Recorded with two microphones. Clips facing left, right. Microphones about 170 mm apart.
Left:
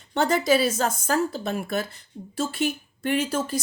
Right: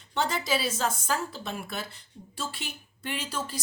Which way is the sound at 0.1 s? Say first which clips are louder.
Left 8 dB; 50° left (ahead or behind).